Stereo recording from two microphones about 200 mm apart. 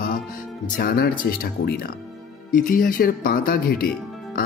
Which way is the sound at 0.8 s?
45° left (ahead or behind).